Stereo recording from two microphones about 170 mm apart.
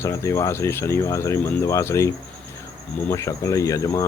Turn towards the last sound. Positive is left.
turn(degrees=20)  # may be behind; listen again after turning